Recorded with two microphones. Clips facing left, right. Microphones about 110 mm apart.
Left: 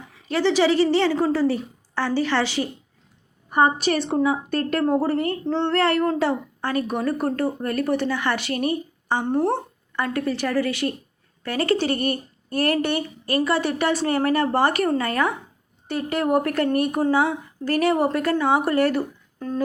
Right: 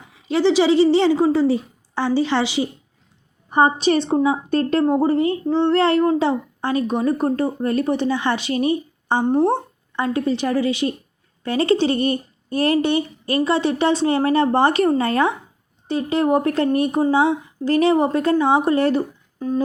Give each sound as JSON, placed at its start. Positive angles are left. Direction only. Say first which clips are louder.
{"t": 0.3, "sound": "a woman's voice", "louder": "right 3 dB", "side_deg": -15}